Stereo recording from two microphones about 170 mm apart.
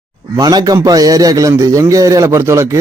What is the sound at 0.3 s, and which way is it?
A man's voice, 20° right (ahead or behind).